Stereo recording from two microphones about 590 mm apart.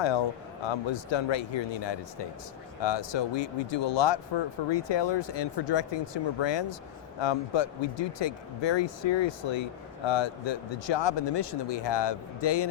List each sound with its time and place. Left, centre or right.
0.0 s speech: left